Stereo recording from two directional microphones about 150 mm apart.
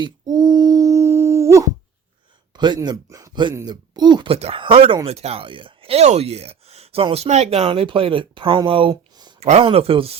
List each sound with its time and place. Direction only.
0.0 s a sound: 25° right (ahead or behind)
2.6 s speech: 30° right (ahead or behind)
9.4 s speech: 45° right (ahead or behind)